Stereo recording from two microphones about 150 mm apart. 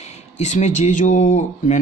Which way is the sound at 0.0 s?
50° left (ahead or behind).